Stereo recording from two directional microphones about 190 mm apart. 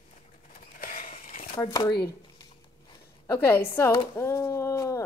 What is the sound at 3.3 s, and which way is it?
Speech, 10° left (ahead or behind).